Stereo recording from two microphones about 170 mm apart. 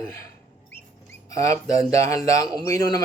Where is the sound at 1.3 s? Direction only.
20° left (ahead or behind).